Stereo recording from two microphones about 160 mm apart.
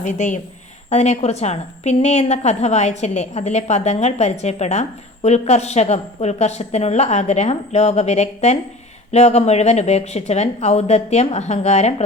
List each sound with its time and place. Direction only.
0.0 s a woman's voice: 50° left (ahead or behind)